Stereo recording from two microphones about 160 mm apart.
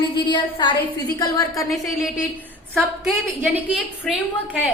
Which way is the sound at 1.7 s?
Centre (ahead or behind).